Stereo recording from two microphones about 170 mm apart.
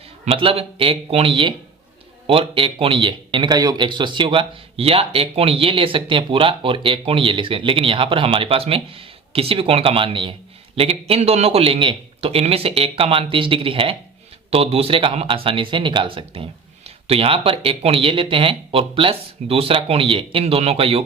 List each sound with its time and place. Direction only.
0.3 s speech: 35° right (ahead or behind)